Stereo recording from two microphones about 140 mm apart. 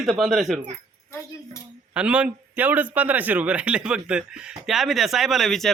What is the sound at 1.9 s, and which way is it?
A man's voice, 10° right (ahead or behind).